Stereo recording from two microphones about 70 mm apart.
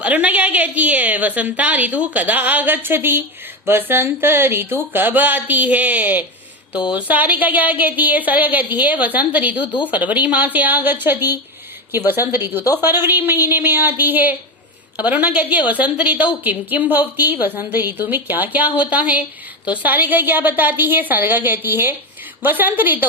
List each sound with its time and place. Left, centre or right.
0.0 s a woman's voice: right